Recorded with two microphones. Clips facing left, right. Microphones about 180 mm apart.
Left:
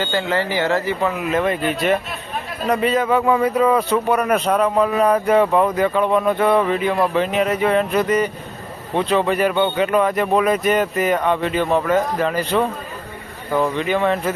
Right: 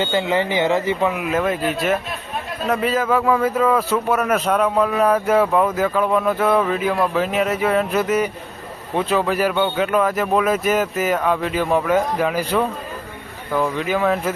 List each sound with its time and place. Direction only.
0.0 s a man's voice: 15° right (ahead or behind)